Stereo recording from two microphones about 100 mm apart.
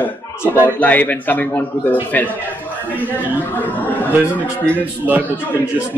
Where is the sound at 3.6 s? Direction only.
20° left (ahead or behind).